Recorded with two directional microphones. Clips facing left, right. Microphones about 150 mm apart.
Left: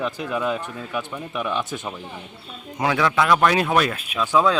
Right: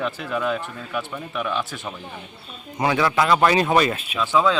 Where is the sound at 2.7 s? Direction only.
Centre (ahead or behind).